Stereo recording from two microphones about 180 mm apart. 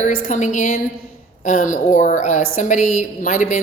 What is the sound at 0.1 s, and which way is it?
A woman's voice, 45° left (ahead or behind).